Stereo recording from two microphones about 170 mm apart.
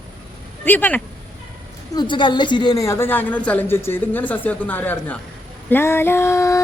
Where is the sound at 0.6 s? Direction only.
10° left (ahead or behind).